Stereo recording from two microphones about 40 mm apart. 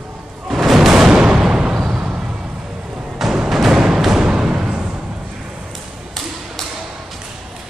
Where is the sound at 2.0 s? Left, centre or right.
Right.